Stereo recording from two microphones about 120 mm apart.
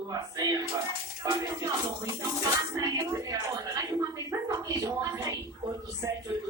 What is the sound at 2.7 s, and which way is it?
A woman's voice, 30° right (ahead or behind).